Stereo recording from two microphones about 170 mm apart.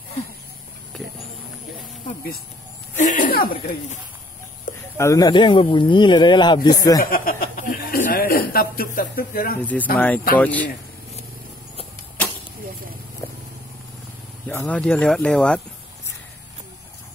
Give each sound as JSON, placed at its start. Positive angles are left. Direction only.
{"t": 0.9, "sound": "a sound", "side_deg": 5}
{"t": 3.0, "sound": "a sound", "side_deg": 50}
{"t": 4.9, "sound": "speech", "side_deg": 20}
{"t": 7.0, "sound": "speech", "side_deg": 55}
{"t": 9.9, "sound": "speech", "side_deg": 10}
{"t": 13.2, "sound": "vehicle", "side_deg": 15}
{"t": 14.5, "sound": "speech", "side_deg": 10}